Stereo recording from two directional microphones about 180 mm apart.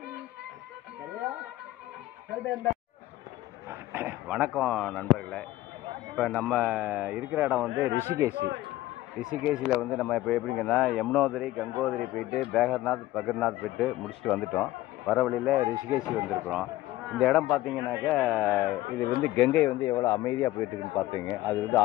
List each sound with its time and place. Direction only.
3.9 s a sound: 10° right (ahead or behind)
4.6 s a man's voice: 5° left (ahead or behind)
8.4 s speech: 70° right (ahead or behind)
9.2 s a man's voice: 5° right (ahead or behind)
15.5 s a man's voice: 15° right (ahead or behind)
18.9 s speech: 10° left (ahead or behind)